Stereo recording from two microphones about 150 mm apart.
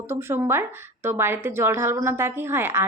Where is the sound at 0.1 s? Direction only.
15° right (ahead or behind).